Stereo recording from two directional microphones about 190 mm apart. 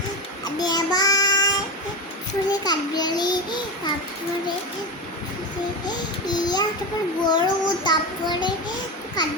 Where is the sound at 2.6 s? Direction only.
20° left (ahead or behind).